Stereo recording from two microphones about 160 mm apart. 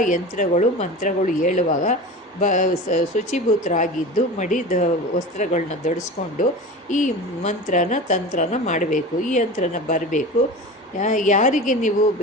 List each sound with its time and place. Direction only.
0.0 s a woman's voice: 50° left (ahead or behind)